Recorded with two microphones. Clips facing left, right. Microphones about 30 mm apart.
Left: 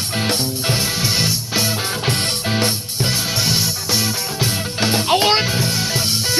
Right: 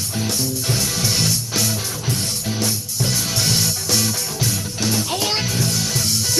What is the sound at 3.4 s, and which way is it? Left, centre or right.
Music, centre.